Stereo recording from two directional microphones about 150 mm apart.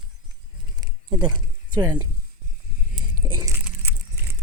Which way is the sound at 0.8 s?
30° right (ahead or behind).